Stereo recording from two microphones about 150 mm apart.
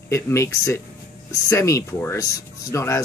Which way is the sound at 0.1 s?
20° left (ahead or behind).